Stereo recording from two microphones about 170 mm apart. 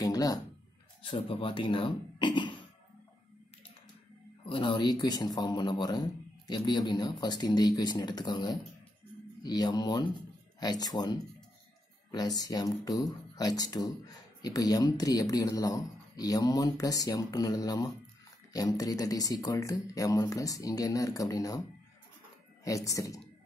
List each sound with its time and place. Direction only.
0.0 s a sound: 20° left (ahead or behind)
1.0 s speech: 30° left (ahead or behind)
4.5 s speech: 30° left (ahead or behind)
22.7 s speech: 20° left (ahead or behind)